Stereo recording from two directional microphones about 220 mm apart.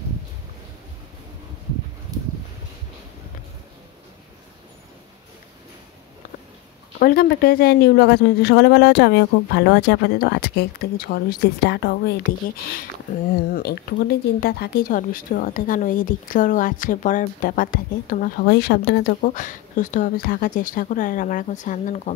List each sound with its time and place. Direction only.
7.0 s speech: 45° left (ahead or behind)
13.5 s speech: 45° left (ahead or behind)